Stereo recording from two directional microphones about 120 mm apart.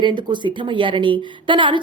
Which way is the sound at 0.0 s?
40° right (ahead or behind).